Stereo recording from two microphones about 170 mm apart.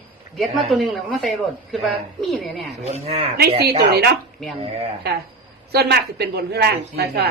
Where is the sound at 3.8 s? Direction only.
70° right (ahead or behind).